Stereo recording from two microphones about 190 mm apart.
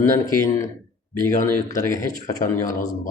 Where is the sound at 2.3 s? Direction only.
20° left (ahead or behind).